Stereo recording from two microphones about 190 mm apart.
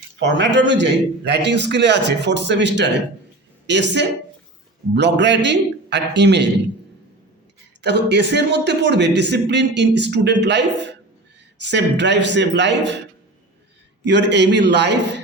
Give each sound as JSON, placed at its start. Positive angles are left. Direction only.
{"t": 0.2, "sound": "a man's voice", "side_deg": -65}
{"t": 7.8, "sound": "a man's voice", "side_deg": -65}
{"t": 14.0, "sound": "speech", "side_deg": -65}